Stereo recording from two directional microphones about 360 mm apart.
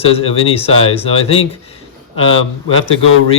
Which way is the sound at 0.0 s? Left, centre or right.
Centre.